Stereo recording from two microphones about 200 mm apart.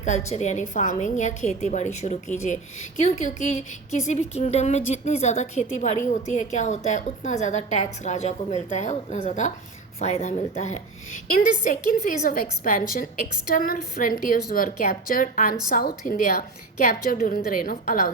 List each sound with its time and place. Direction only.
0.3 s a woman's voice: 35° left (ahead or behind)